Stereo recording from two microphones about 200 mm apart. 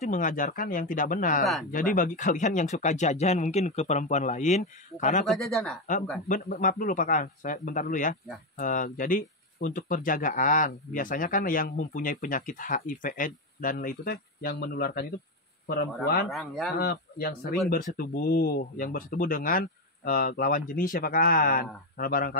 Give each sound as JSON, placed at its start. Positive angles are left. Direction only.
{"t": 0.0, "sound": "speech", "side_deg": 40}
{"t": 5.2, "sound": "speech", "side_deg": 0}
{"t": 6.2, "sound": "speech", "side_deg": 40}
{"t": 16.3, "sound": "speech", "side_deg": 0}
{"t": 16.7, "sound": "speech", "side_deg": 55}